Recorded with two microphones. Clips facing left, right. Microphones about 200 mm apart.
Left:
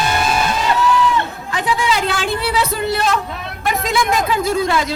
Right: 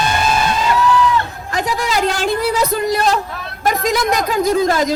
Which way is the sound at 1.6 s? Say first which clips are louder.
Right 1 dB; 40° right (ahead or behind).